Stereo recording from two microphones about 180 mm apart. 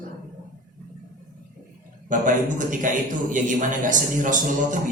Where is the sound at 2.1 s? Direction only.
45° right (ahead or behind).